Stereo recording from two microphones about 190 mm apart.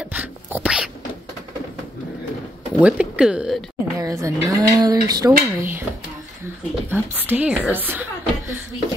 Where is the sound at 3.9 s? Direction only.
15° right (ahead or behind).